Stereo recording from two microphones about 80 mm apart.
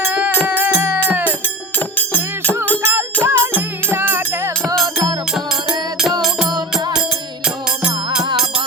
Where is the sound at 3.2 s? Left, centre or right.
Right.